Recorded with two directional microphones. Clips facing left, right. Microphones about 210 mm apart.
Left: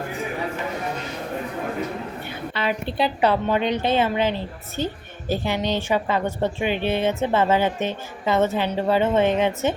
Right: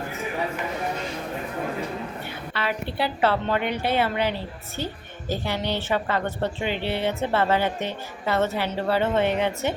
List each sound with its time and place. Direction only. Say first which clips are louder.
2.5 s a woman's voice: left 3 dB; 20° left (ahead or behind)
5.5 s a woman's voice: left 3 dB; 15° left (ahead or behind)